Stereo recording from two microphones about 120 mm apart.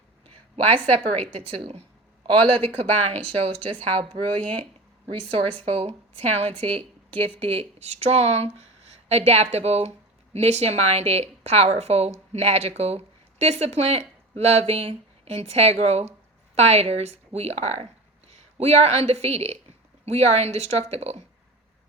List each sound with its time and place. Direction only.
0.5 s speech: 55° right (ahead or behind)
4.4 s speech: 10° left (ahead or behind)
5.3 s speech: 55° right (ahead or behind)